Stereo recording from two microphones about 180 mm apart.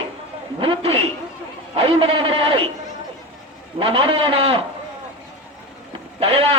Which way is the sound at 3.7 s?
30° right (ahead or behind).